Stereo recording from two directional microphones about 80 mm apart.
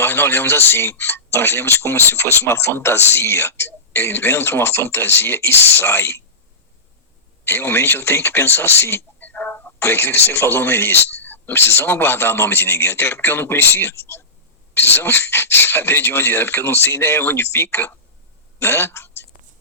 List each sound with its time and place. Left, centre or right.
0.0 s speech: left
7.4 s speech: left